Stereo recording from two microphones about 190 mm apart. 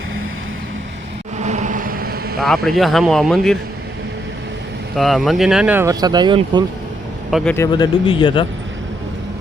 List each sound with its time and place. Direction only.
1.4 s vehicle: 40° right (ahead or behind)
2.6 s speech: centre (ahead or behind)
4.9 s speech: centre (ahead or behind); by 6.7 s 25° right (ahead or behind)
7.3 s a man's voice: centre (ahead or behind)
7.5 s speech: 20° left (ahead or behind)